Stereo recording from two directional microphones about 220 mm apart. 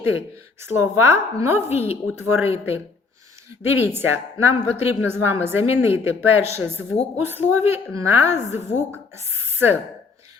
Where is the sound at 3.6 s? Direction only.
10° right (ahead or behind).